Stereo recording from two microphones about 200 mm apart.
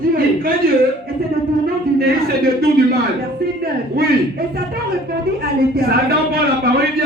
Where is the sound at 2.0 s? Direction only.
50° right (ahead or behind).